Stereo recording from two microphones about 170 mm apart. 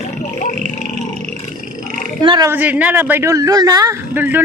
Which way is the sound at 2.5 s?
10° right (ahead or behind).